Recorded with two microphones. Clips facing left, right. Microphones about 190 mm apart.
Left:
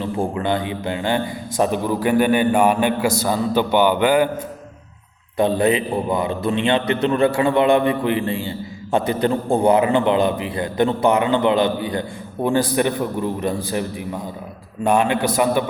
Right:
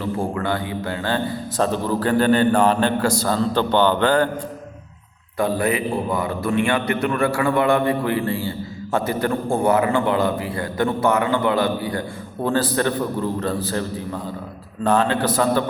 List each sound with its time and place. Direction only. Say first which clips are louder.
0.0 s a man's voice: left 1 dB; 20° left (ahead or behind)
5.4 s a man's voice: left 3 dB; 20° left (ahead or behind)